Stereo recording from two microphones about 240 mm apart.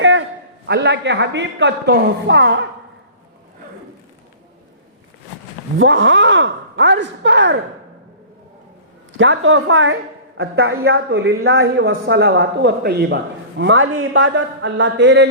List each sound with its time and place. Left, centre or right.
0.0 s a sound: right
0.7 s a woman's voice: right
5.8 s a woman's voice: right
9.1 s a woman's voice: right